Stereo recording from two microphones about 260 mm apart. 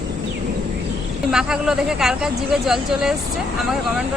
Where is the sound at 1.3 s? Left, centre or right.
Centre.